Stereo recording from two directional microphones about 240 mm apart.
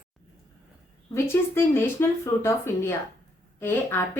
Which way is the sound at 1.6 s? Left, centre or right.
Centre.